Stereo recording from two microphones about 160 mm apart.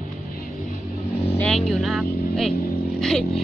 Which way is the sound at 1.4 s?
5° left (ahead or behind).